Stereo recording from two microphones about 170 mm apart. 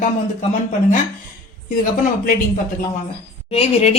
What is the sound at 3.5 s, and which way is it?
Speech, 35° left (ahead or behind).